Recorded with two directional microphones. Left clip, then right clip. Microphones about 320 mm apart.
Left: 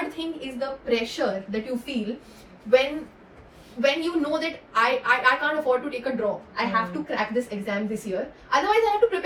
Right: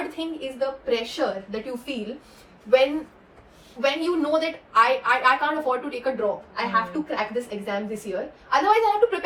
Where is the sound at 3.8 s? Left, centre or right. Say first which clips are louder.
Even; centre.